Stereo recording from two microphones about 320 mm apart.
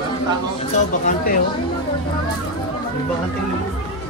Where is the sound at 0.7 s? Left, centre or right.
Left.